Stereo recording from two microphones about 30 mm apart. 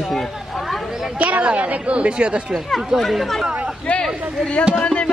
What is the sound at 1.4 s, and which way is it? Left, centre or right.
A woman's voice, right.